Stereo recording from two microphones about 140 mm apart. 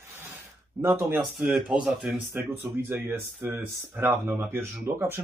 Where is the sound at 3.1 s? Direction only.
15° right (ahead or behind).